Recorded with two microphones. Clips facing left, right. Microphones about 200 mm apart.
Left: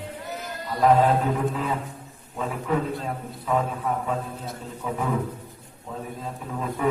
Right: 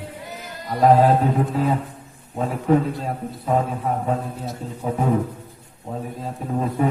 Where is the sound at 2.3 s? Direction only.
40° right (ahead or behind).